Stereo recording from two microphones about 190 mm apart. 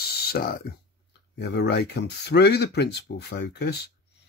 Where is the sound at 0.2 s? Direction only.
55° left (ahead or behind).